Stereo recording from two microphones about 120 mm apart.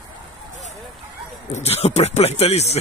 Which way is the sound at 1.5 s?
60° left (ahead or behind).